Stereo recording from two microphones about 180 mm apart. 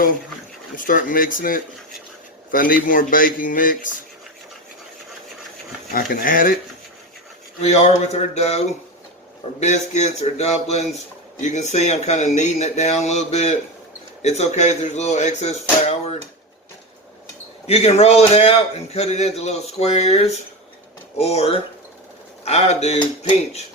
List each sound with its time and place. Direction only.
0.8 s speech: 50° left (ahead or behind)
5.9 s speech: 50° left (ahead or behind)
7.6 s a man's voice: 35° left (ahead or behind)
15.9 s a sound: 35° left (ahead or behind)
17.7 s a man's voice: 35° left (ahead or behind)